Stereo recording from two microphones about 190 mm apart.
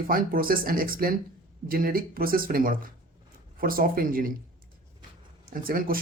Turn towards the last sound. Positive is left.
turn(degrees=-50)  # may be behind; listen again after turning